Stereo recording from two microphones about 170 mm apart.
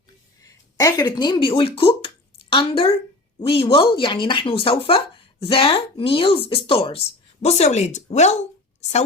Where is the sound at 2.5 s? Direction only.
30° left (ahead or behind).